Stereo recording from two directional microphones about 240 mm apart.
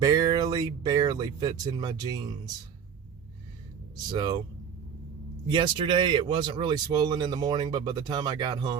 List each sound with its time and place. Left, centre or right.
0.0 s speech: centre
3.9 s speech: centre
5.5 s speech: centre